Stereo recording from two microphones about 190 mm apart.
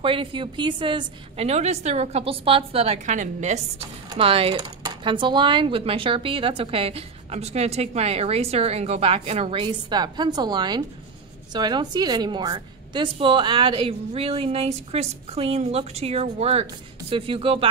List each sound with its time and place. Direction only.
0.0 s a woman's voice: 25° right (ahead or behind)